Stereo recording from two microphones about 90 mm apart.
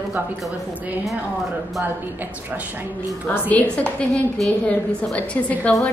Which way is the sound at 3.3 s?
20° left (ahead or behind).